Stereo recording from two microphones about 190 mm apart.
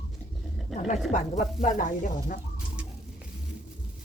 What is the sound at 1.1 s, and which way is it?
Speech, 40° left (ahead or behind).